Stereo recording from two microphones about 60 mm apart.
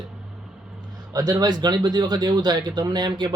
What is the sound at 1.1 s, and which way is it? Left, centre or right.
Speech, right.